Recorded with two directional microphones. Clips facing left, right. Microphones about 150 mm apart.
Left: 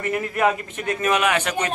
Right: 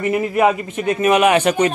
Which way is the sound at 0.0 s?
10° right (ahead or behind).